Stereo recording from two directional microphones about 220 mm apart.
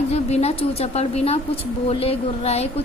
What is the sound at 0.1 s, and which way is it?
A woman's voice, 30° left (ahead or behind).